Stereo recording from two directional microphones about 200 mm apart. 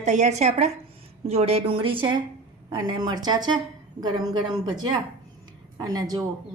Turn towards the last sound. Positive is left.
turn(degrees=-20)  # may be behind; listen again after turning